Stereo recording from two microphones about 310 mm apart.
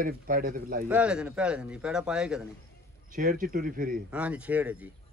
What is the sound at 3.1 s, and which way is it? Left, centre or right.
Speech, right.